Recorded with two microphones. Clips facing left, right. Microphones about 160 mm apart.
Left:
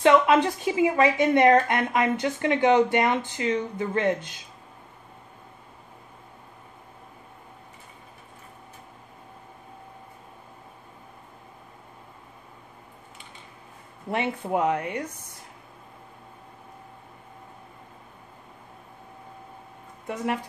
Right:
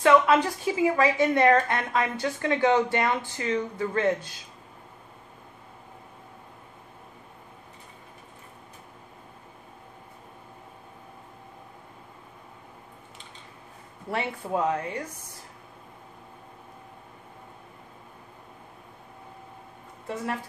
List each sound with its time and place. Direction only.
0.0 s a woman's voice: 20° left (ahead or behind)
14.1 s a woman's voice: 20° left (ahead or behind)